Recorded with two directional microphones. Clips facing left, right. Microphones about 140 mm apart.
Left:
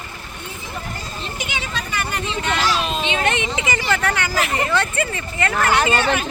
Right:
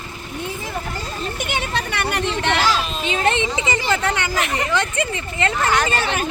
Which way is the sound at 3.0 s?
35° right (ahead or behind).